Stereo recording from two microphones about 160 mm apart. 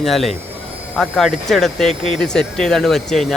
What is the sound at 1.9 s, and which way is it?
Speech, 35° right (ahead or behind).